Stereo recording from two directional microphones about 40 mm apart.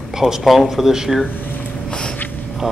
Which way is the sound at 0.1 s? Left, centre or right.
Centre.